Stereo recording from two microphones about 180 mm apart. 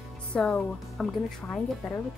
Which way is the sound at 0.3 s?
5° left (ahead or behind).